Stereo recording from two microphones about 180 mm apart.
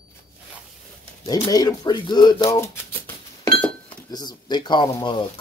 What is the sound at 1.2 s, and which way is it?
Speech, 20° left (ahead or behind).